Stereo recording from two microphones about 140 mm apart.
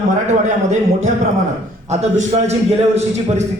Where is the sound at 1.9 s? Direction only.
50° right (ahead or behind).